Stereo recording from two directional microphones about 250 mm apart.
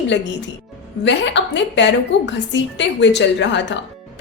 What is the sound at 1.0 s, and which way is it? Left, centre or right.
A woman's voice, left.